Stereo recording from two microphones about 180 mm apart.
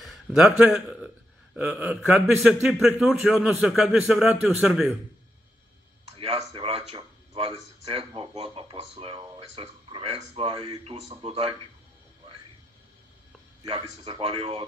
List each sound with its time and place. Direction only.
0.0 s a man's voice: centre (ahead or behind)
6.0 s speech: 35° right (ahead or behind)
13.7 s speech: 30° right (ahead or behind)